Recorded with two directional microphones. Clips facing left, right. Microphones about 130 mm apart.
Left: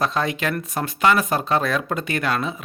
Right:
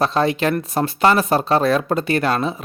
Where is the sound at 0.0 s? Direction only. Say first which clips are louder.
Right 5 dB; 30° right (ahead or behind).